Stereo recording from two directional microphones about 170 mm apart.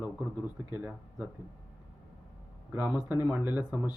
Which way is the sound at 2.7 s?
10° right (ahead or behind).